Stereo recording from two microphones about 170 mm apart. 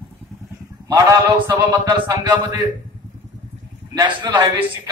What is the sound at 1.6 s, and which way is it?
A man's voice, 25° right (ahead or behind).